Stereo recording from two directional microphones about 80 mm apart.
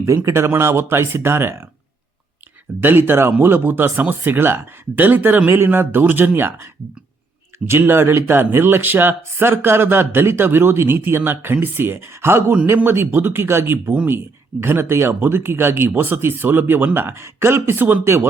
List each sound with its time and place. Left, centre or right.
0.3 s speech: right
2.8 s speech: right
13.9 s speech: centre
14.2 s speech: right